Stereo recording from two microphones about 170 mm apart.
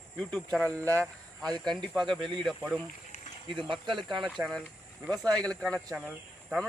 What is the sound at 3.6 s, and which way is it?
Speech, 30° right (ahead or behind).